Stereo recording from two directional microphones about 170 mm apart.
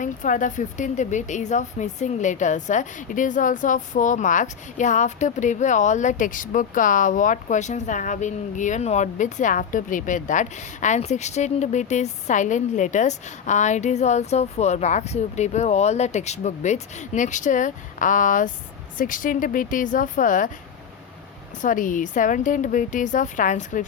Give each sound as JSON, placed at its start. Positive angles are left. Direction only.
{"t": 0.0, "sound": "speech", "side_deg": 50}
{"t": 21.6, "sound": "speech", "side_deg": 50}